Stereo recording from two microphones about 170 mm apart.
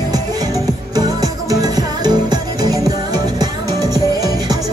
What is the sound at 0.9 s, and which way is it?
Music, 20° right (ahead or behind).